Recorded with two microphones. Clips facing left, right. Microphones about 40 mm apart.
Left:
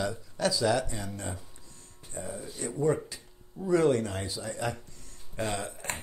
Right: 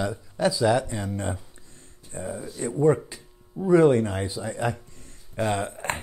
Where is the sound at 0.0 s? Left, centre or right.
Centre.